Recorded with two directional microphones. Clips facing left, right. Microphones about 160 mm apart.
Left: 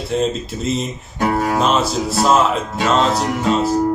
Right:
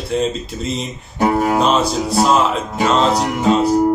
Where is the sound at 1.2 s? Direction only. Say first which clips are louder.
Right 3 dB; 20° right (ahead or behind).